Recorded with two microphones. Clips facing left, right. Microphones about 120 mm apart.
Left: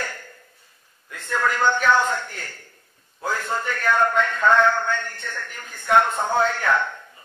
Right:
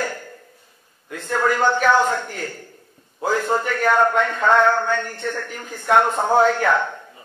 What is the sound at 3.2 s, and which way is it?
Speech, 25° right (ahead or behind).